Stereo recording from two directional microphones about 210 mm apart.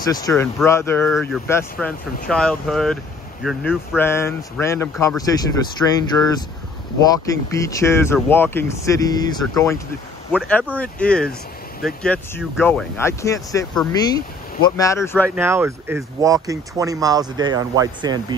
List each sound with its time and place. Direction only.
0.0 s speech: 15° left (ahead or behind)
10.8 s speech: 5° left (ahead or behind)
15.3 s speech: 10° right (ahead or behind)